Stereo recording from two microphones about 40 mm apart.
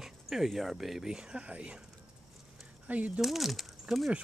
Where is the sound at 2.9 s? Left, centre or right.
Right.